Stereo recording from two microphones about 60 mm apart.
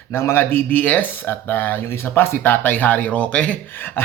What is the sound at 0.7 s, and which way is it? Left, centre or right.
Speech, left.